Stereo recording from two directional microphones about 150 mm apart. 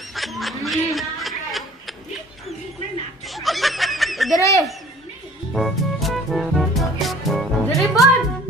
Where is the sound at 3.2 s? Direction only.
Centre (ahead or behind).